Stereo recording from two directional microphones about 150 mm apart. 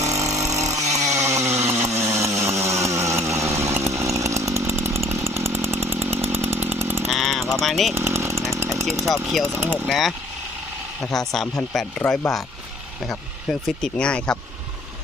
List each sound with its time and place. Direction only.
0.0 s vehicle: 20° right (ahead or behind)
1.0 s chainsaw: 20° right (ahead or behind)
7.1 s a sound: centre (ahead or behind)
7.9 s chainsaw: 15° right (ahead or behind)
9.6 s speech: 15° right (ahead or behind)
9.9 s speech: centre (ahead or behind)